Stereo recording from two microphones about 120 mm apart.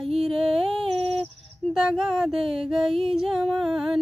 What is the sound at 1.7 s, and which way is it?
Music, 5° right (ahead or behind).